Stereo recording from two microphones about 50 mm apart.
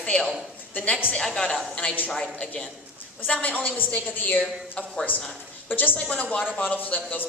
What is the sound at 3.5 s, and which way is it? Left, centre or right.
Speech, left.